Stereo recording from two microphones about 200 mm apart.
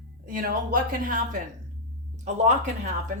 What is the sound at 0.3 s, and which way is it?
A woman's voice, 45° right (ahead or behind).